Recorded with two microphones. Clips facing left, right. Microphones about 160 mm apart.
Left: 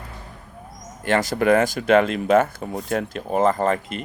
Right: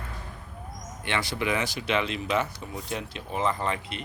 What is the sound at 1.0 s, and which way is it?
Speech, 45° left (ahead or behind).